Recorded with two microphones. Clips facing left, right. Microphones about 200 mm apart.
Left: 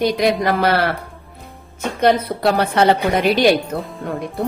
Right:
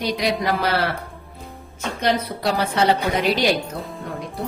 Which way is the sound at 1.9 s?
55° left (ahead or behind).